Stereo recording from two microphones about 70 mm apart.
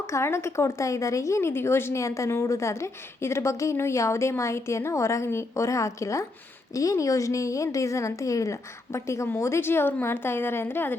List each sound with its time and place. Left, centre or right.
0.1 s a woman's voice: left